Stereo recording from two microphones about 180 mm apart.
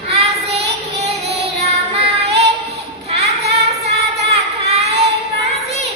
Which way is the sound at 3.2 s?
35° right (ahead or behind).